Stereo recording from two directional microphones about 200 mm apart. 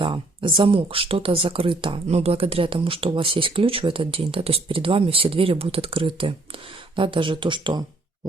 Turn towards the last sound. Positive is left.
turn(degrees=-25)  # may be behind; listen again after turning